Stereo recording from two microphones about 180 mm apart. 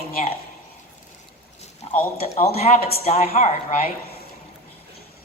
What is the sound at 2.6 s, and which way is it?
A man's voice, 40° left (ahead or behind).